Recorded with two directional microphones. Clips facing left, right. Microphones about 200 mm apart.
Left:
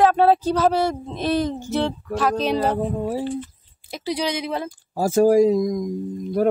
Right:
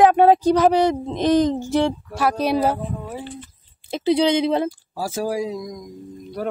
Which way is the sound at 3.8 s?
25° right (ahead or behind).